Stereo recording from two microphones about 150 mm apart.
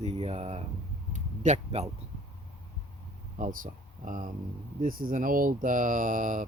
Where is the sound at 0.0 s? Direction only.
45° right (ahead or behind).